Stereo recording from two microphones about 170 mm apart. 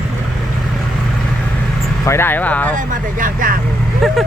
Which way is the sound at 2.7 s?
50° right (ahead or behind).